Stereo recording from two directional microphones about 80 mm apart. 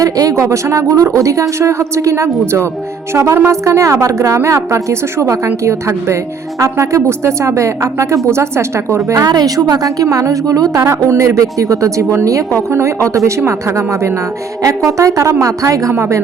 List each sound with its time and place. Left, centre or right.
0.0 s a woman's voice: right
6.6 s a woman's voice: right
9.1 s a woman's voice: right